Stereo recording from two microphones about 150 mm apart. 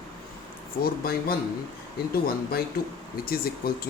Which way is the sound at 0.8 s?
90° left.